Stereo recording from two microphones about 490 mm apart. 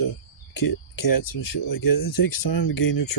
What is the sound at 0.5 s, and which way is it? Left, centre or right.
Speech, left.